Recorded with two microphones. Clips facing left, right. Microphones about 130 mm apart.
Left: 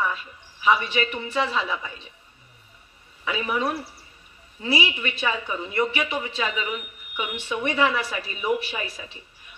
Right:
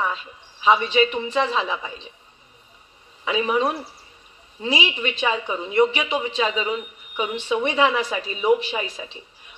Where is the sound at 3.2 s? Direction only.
20° right (ahead or behind).